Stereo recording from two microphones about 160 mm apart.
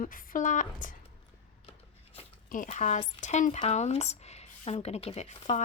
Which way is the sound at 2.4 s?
55° left (ahead or behind).